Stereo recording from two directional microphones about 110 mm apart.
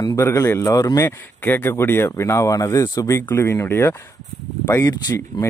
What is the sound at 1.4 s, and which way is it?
Speech, 20° left (ahead or behind).